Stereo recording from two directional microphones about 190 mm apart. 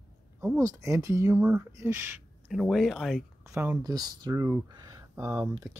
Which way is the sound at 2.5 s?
Centre (ahead or behind).